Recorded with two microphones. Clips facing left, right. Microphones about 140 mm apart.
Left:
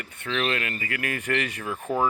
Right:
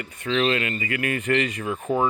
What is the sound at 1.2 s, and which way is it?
Speech, 70° left (ahead or behind).